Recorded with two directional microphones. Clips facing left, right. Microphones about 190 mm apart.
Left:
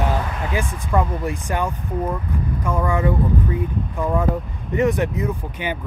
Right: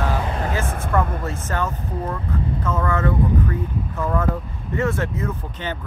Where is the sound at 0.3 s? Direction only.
40° right (ahead or behind).